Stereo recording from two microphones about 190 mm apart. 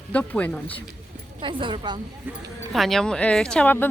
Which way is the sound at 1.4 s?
25° right (ahead or behind).